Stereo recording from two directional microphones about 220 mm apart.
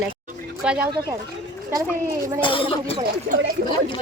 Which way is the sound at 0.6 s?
5° right (ahead or behind).